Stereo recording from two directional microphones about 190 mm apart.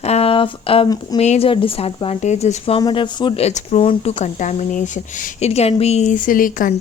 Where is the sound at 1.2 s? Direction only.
35° left (ahead or behind).